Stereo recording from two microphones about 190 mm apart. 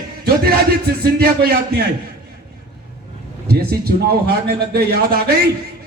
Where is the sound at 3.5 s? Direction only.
55° right (ahead or behind).